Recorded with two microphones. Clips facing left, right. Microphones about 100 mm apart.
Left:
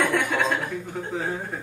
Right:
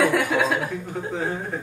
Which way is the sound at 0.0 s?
5° right (ahead or behind).